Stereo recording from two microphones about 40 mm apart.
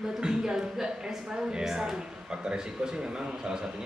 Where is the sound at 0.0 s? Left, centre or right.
Centre.